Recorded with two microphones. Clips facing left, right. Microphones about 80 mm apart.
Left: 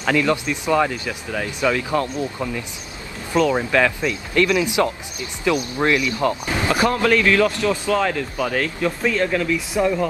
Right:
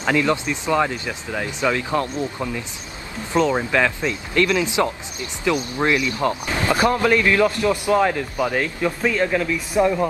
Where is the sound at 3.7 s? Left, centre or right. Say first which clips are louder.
Left 1 dB; centre.